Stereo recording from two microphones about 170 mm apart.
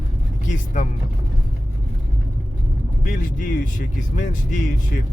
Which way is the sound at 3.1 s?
50° left (ahead or behind).